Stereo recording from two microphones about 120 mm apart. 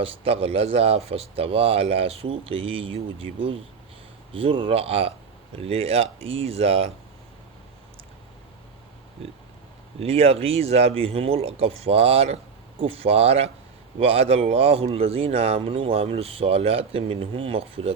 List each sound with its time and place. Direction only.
0.0 s speech: 55° right (ahead or behind)
10.0 s speech: 55° right (ahead or behind)